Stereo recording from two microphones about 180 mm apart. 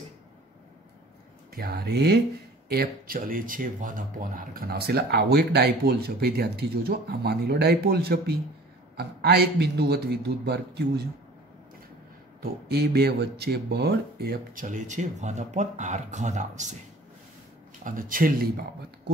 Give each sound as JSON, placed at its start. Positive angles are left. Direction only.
{"t": 1.5, "sound": "speech", "side_deg": -60}
{"t": 12.4, "sound": "speech", "side_deg": -60}
{"t": 17.8, "sound": "speech", "side_deg": -50}